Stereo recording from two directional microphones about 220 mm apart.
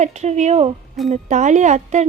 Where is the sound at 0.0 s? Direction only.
30° right (ahead or behind).